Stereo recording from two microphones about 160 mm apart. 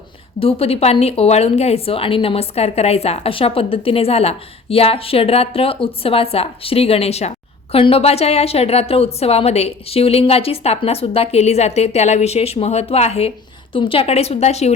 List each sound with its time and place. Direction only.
0.3 s a woman's voice: 35° left (ahead or behind)